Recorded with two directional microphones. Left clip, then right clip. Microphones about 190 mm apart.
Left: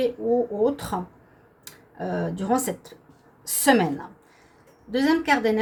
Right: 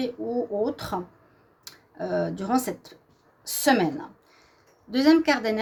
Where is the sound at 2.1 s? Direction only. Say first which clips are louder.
Even; 50° right (ahead or behind).